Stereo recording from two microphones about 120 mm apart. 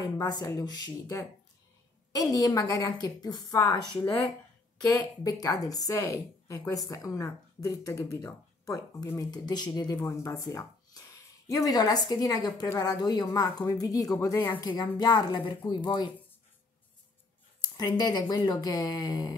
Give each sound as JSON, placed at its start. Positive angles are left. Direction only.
{"t": 0.0, "sound": "speech", "side_deg": 35}
{"t": 4.9, "sound": "a woman's voice", "side_deg": 30}
{"t": 17.7, "sound": "speech", "side_deg": 35}